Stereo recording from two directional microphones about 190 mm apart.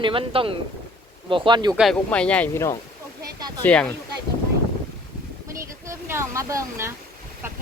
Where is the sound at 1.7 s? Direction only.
Centre (ahead or behind).